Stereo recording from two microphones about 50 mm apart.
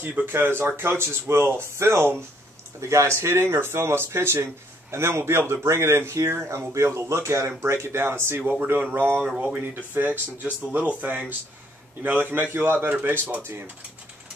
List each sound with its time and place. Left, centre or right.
0.2 s speech: right
2.8 s speech: right
3.2 s speech: right
6.7 s speech: right